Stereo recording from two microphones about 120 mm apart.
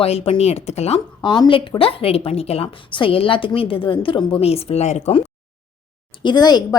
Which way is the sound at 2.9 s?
50° left (ahead or behind).